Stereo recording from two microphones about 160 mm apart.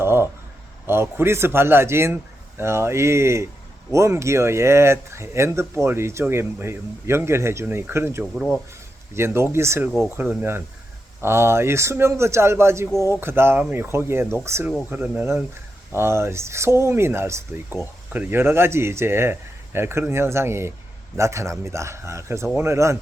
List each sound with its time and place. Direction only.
0.0 s a sound: 15° right (ahead or behind)
0.9 s speech: 15° right (ahead or behind)
8.2 s speech: centre (ahead or behind)
9.1 s speech: 15° right (ahead or behind)